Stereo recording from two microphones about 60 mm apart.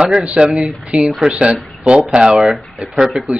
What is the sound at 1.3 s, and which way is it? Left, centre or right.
Speech, right.